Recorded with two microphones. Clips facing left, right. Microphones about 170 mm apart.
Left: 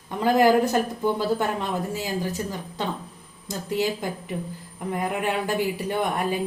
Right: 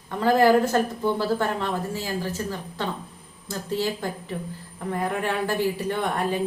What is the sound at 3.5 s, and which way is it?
Speech, 15° left (ahead or behind).